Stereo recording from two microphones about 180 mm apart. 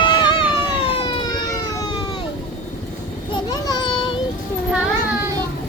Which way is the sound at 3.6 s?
20° left (ahead or behind).